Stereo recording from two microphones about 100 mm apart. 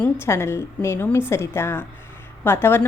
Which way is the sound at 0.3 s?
25° left (ahead or behind).